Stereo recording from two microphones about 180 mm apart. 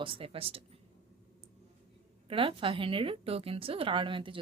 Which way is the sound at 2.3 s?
30° right (ahead or behind).